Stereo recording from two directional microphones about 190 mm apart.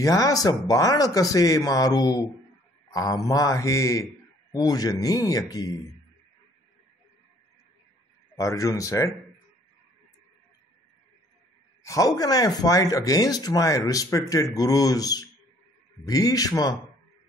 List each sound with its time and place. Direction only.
0.0 s a man's voice: 20° left (ahead or behind)
8.4 s a man's voice: 15° left (ahead or behind)
11.8 s speech: 15° left (ahead or behind)